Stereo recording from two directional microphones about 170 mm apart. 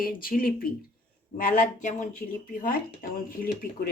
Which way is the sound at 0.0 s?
60° left (ahead or behind).